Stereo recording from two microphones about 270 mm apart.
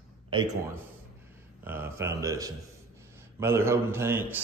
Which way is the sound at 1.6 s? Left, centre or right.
Centre.